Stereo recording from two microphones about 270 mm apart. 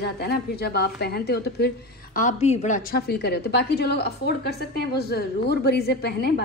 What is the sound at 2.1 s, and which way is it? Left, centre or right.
A woman's voice, left.